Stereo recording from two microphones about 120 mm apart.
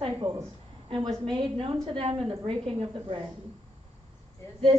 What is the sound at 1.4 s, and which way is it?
Speech, 45° right (ahead or behind).